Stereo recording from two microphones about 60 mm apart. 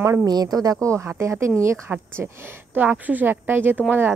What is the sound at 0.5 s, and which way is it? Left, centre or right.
Speech, right.